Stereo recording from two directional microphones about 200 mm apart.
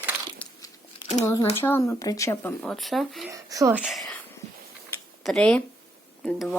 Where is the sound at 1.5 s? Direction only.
10° left (ahead or behind).